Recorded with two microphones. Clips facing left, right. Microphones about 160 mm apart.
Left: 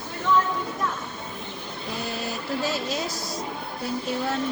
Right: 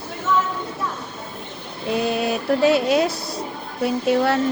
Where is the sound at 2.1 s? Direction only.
70° right (ahead or behind).